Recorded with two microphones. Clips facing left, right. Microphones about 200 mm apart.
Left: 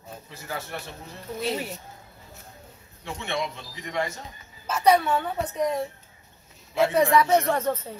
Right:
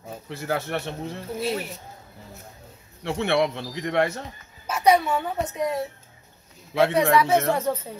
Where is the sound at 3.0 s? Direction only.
70° right (ahead or behind).